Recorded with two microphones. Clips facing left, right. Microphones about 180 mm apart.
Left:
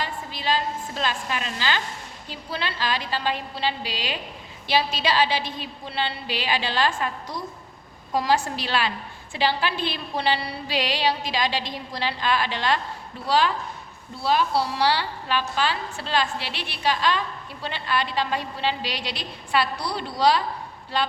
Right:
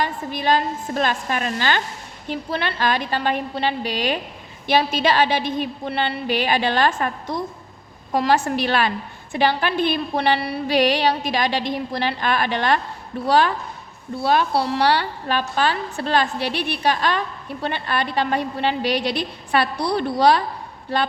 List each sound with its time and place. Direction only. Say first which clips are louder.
0.0 s a woman's voice: right 6 dB; 50° right (ahead or behind)
8.1 s a woman's voice: right 4 dB; 60° right (ahead or behind)